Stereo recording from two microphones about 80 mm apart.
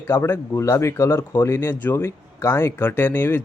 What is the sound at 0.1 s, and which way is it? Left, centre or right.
Speech, left.